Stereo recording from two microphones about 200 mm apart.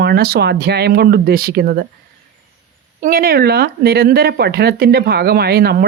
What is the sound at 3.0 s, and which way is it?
Speech, 45° right (ahead or behind).